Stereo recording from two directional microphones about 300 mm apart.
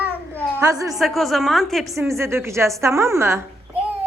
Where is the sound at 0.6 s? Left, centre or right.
Centre.